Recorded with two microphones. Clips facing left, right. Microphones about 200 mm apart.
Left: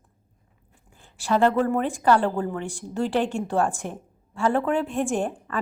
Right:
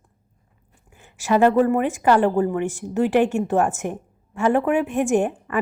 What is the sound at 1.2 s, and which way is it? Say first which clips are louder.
A woman's voice: right 4 dB; 15° right (ahead or behind).